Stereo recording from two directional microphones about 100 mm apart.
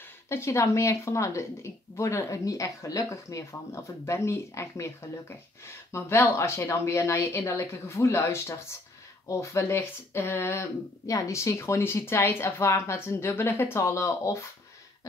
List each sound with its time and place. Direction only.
0.3 s speech: 25° left (ahead or behind)